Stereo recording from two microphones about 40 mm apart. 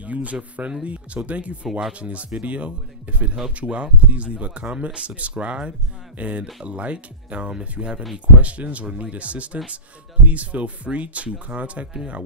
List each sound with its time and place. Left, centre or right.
0.0 s speech: right